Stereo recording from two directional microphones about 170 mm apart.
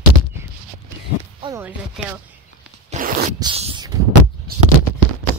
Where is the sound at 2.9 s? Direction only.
50° right (ahead or behind).